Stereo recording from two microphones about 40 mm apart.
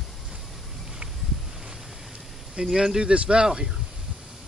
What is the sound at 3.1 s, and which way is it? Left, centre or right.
Speech, right.